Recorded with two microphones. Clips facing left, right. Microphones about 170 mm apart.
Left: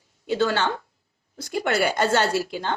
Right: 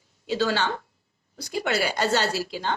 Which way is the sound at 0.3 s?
55° left (ahead or behind).